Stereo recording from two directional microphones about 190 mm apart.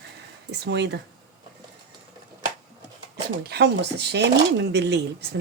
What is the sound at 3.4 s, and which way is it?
Speech, 60° right (ahead or behind).